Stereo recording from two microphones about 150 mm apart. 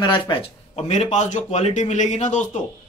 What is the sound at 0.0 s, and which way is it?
Speech, 30° left (ahead or behind).